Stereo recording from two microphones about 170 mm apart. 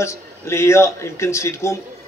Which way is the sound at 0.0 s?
15° left (ahead or behind).